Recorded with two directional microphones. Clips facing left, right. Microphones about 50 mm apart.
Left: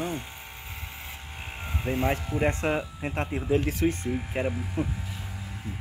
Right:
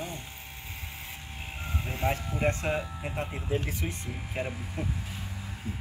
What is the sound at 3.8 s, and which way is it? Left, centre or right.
Speech, left.